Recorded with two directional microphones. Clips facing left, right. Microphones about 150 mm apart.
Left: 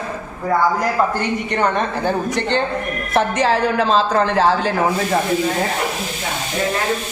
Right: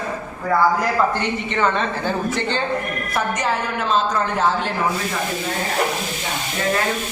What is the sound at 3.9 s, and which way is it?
Speech, 90° left.